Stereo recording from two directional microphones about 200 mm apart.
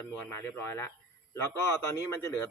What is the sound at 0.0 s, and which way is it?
Speech, 10° left (ahead or behind).